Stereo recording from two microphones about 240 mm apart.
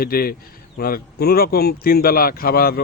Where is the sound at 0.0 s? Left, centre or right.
Left.